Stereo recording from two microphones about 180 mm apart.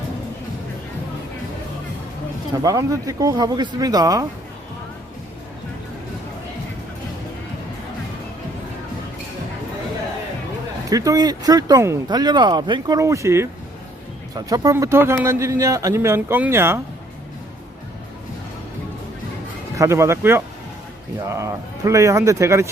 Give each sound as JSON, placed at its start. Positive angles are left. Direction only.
{"t": 2.5, "sound": "speech", "side_deg": -20}
{"t": 10.8, "sound": "speech", "side_deg": -20}
{"t": 19.7, "sound": "speech", "side_deg": -15}